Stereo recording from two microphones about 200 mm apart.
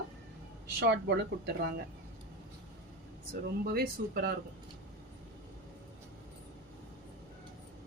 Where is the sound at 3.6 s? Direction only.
50° right (ahead or behind).